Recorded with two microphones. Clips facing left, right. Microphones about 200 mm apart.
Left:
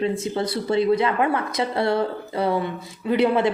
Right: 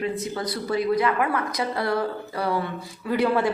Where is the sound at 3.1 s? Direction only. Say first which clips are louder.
Left 3 dB; 20° left (ahead or behind).